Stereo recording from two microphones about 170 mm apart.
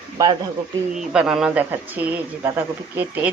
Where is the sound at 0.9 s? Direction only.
5° right (ahead or behind).